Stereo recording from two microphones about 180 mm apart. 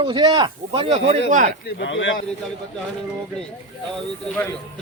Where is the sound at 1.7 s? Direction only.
90° left.